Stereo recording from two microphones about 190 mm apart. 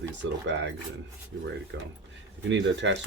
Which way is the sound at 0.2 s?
65° right (ahead or behind).